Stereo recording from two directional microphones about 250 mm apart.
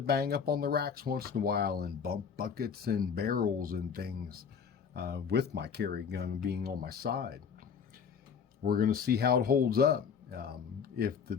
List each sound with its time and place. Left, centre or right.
0.0 s speech: right
8.6 s speech: right